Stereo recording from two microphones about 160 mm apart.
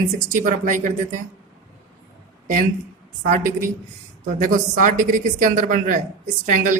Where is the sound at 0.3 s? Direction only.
50° right (ahead or behind).